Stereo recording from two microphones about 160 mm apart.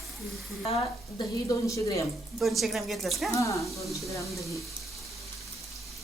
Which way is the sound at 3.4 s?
20° left (ahead or behind).